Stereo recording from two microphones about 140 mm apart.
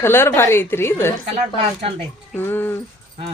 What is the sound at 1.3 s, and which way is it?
Speech, 50° right (ahead or behind).